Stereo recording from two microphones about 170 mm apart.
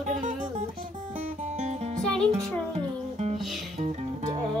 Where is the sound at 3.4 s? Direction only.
Centre (ahead or behind).